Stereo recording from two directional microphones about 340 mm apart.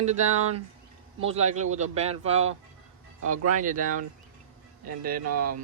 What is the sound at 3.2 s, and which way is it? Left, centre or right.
Speech, right.